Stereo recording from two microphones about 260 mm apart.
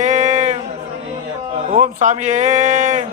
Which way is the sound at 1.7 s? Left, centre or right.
Right.